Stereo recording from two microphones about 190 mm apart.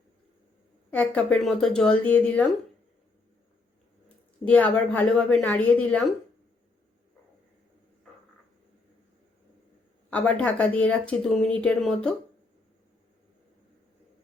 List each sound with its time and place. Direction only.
0.9 s speech: 5° left (ahead or behind)
4.4 s a woman's voice: 5° left (ahead or behind)
10.1 s a woman's voice: 5° left (ahead or behind)